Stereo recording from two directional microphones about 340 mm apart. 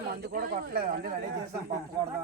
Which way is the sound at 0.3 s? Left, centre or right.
Right.